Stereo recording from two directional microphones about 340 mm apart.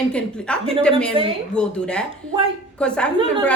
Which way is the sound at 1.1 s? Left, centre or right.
Centre.